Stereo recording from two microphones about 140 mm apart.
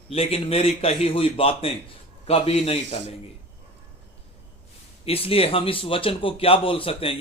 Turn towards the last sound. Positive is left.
turn(degrees=40)  # may be behind; listen again after turning